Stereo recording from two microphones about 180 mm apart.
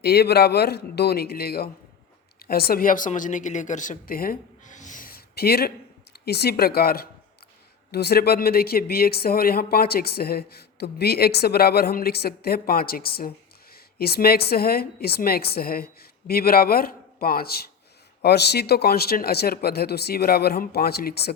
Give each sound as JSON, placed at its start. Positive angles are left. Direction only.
{"t": 0.0, "sound": "a woman's voice", "side_deg": 65}